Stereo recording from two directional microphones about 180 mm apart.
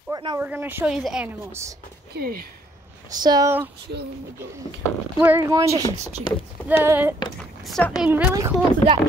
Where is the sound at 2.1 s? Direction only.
55° right (ahead or behind).